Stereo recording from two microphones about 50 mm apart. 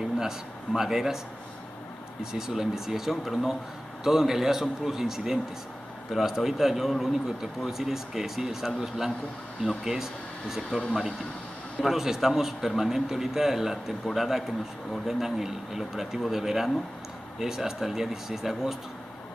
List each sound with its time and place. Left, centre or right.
0.7 s a man's voice: centre
2.3 s a man's voice: centre